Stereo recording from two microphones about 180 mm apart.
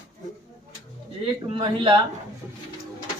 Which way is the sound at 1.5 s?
30° right (ahead or behind).